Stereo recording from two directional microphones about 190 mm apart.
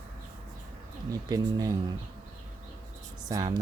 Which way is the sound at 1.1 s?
20° right (ahead or behind).